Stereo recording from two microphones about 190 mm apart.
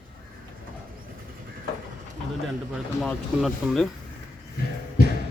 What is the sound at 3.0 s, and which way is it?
Speech, centre (ahead or behind).